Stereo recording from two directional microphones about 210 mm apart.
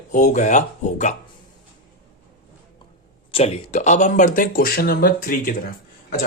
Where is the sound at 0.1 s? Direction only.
35° left (ahead or behind).